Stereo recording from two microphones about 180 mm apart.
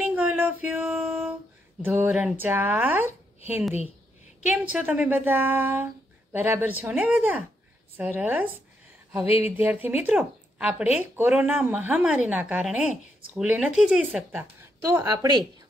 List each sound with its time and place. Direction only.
0.0 s a sound: 5° right (ahead or behind)
1.8 s speech: 10° right (ahead or behind)
4.5 s speech: 5° right (ahead or behind)
9.2 s speech: 35° left (ahead or behind)
9.6 s speech: 10° right (ahead or behind)